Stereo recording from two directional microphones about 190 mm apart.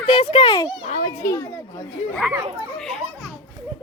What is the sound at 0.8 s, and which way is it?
Children playing, 40° left (ahead or behind).